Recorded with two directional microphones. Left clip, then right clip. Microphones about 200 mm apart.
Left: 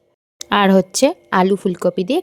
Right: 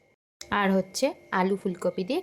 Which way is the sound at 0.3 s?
45° left (ahead or behind).